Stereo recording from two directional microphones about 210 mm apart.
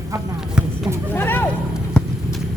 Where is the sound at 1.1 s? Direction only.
10° left (ahead or behind).